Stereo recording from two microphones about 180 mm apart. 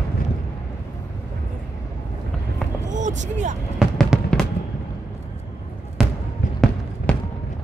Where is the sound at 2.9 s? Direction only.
45° right (ahead or behind).